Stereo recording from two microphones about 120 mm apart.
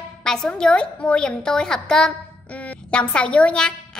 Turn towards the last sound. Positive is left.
turn(degrees=5)  # may be behind; listen again after turning